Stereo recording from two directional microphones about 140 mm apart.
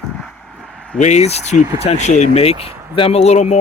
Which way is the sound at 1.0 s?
55° left (ahead or behind).